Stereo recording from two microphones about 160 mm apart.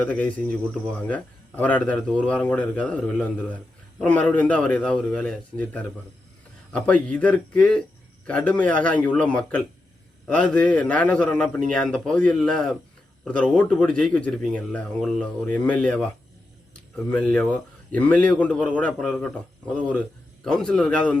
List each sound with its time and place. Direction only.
0.0 s speech: 10° left (ahead or behind)
17.1 s a man's voice: 5° left (ahead or behind)